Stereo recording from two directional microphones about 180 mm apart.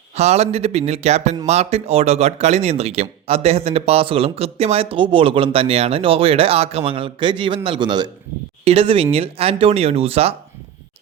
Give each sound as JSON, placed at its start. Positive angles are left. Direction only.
{"t": 0.2, "sound": "speech", "side_deg": -35}